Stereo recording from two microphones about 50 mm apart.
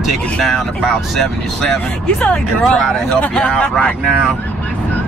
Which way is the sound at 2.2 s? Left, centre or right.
Centre.